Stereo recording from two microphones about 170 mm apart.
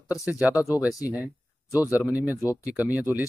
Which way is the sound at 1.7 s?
20° left (ahead or behind).